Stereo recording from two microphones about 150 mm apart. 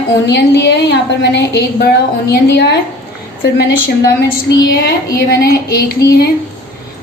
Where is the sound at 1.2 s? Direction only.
90° left.